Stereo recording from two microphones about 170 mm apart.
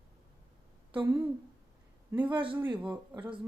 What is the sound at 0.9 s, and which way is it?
A man's voice, 10° right (ahead or behind).